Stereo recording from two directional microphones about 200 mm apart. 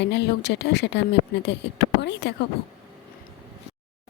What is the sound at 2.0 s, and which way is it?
Speech, 60° left (ahead or behind).